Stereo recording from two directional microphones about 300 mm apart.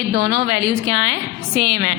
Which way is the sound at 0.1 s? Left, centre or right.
Right.